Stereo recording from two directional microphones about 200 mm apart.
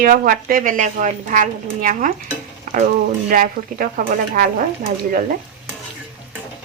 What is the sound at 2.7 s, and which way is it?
Frying, 40° right (ahead or behind).